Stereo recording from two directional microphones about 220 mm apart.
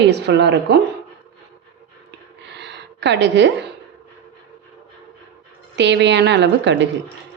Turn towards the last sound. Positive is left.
turn(degrees=-50)  # may be behind; listen again after turning